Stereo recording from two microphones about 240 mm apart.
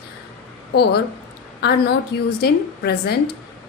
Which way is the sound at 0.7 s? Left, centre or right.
Left.